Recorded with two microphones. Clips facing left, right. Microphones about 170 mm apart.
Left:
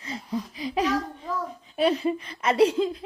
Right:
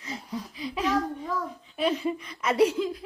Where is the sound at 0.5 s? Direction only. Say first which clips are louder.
Left 3 dB; 90° left.